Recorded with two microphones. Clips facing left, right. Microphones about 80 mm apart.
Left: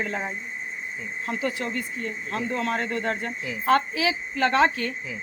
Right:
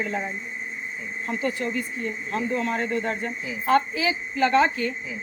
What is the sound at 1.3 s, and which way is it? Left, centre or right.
A woman's voice, left.